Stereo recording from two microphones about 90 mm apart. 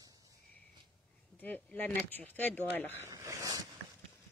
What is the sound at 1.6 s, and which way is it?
Speech, 10° left (ahead or behind).